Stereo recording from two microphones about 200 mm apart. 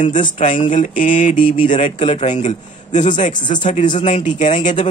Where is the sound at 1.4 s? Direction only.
25° left (ahead or behind).